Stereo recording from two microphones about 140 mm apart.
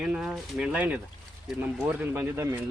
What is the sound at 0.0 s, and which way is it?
Speech, 5° right (ahead or behind).